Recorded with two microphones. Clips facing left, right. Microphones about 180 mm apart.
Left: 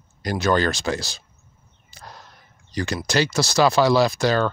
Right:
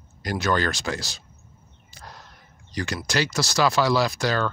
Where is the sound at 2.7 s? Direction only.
30° left (ahead or behind).